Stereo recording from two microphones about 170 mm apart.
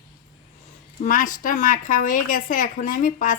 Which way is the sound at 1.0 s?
55° left (ahead or behind).